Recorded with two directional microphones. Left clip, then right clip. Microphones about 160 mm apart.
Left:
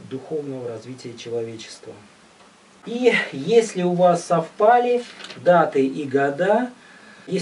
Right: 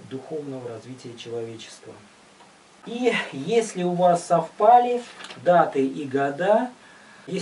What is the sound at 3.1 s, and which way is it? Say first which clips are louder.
Speech: left 5 dB; 15° left (ahead or behind).